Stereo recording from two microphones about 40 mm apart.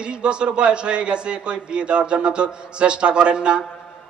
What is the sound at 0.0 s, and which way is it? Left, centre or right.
Speech, right.